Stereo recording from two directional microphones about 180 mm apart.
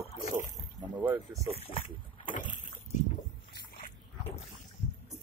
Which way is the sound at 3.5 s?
55° left (ahead or behind).